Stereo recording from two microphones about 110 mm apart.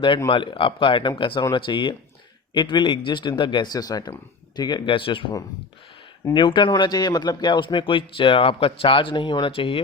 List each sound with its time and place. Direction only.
0.3 s a man's voice: 50° left (ahead or behind)
4.9 s a man's voice: 50° left (ahead or behind)
6.3 s a man's voice: 45° left (ahead or behind)